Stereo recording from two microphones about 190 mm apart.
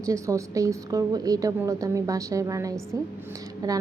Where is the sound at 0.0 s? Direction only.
15° right (ahead or behind).